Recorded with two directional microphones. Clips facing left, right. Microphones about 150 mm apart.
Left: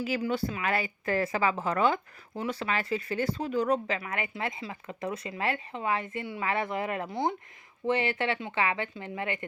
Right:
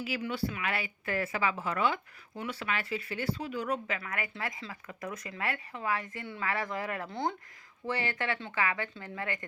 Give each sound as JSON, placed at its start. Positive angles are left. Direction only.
{"t": 0.0, "sound": "speech", "side_deg": 40}
{"t": 4.0, "sound": "speech", "side_deg": 25}